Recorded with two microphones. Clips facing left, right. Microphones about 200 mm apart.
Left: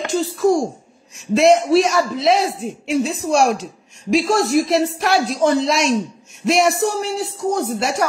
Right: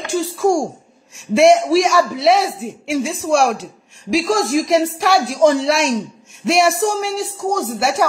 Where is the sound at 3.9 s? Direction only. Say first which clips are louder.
Even; 80° right.